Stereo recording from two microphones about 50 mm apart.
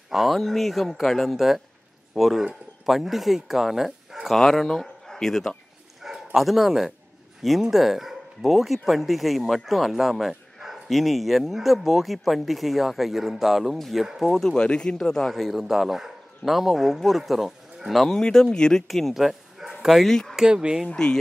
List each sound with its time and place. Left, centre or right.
0.1 s speech: centre
1.3 s speech: centre
4.4 s speech: centre
6.0 s speech: centre
14.4 s speech: centre
18.0 s speech: centre
20.1 s speech: centre
20.3 s speech: centre
20.9 s speech: centre